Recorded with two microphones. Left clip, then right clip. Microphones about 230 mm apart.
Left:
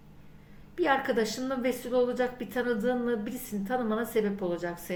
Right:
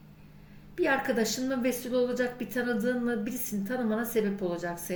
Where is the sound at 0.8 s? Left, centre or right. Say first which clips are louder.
Left 1 dB; centre.